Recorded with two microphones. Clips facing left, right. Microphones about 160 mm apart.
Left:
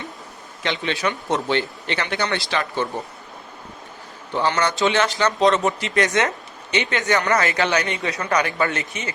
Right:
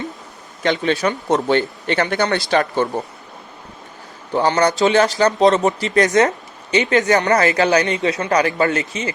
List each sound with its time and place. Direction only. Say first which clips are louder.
0.6 s speech: right 6 dB; 45° right (ahead or behind)
4.4 s speech: right 5 dB; 40° right (ahead or behind)
8.0 s speech: right 5 dB; 25° right (ahead or behind)